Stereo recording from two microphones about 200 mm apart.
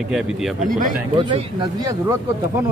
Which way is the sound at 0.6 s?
40° right (ahead or behind).